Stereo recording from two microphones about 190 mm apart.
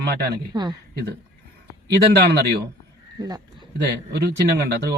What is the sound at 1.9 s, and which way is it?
Speech, 60° right (ahead or behind).